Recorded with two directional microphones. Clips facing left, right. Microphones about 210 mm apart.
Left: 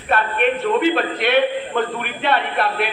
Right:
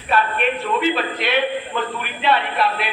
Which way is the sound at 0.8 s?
55° left (ahead or behind).